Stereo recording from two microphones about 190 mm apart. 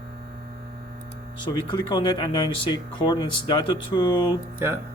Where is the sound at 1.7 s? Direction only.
25° left (ahead or behind).